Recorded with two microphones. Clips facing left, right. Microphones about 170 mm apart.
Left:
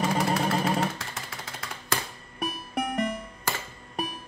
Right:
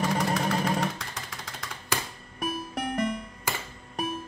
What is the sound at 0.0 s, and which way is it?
Vehicle, 5° left (ahead or behind).